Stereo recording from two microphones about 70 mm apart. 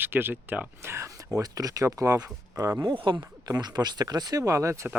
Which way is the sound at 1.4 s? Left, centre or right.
Right.